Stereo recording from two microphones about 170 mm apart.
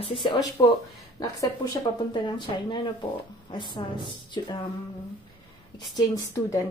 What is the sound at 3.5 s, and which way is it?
A woman's voice, 30° left (ahead or behind).